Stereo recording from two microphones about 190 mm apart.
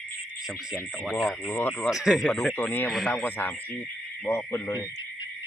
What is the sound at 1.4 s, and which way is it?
Speech, 10° left (ahead or behind).